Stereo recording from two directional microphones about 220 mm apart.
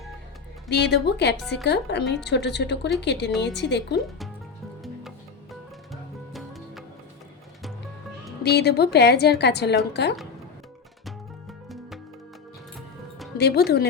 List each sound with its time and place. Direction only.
0.7 s a woman's voice: 50° left (ahead or behind)
4.8 s music: centre (ahead or behind)
8.4 s a woman's voice: 45° left (ahead or behind)
13.4 s a woman's voice: 50° left (ahead or behind)